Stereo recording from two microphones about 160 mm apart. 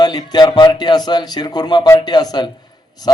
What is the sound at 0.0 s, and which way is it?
A man's voice, 25° left (ahead or behind).